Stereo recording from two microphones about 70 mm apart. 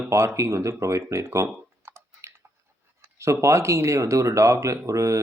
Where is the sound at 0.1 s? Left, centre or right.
Right.